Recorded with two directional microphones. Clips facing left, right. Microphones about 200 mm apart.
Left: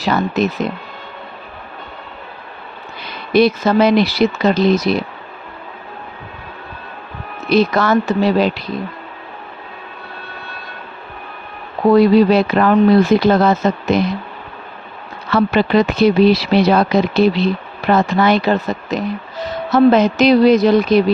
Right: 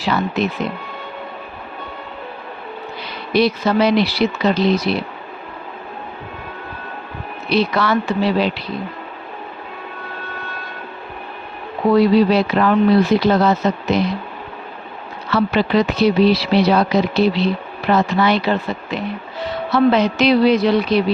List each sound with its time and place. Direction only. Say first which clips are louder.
0.0 s speech: left 3 dB; 45° left (ahead or behind)
3.3 s speech: left 3 dB; 50° left (ahead or behind)
7.5 s speech: left 4 dB; 45° left (ahead or behind)
11.9 s speech: left 2 dB; 50° left (ahead or behind)
15.3 s speech: left 3 dB; 50° left (ahead or behind)